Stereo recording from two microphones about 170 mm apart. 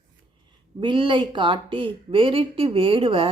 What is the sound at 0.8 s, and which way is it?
A woman's voice, 30° right (ahead or behind).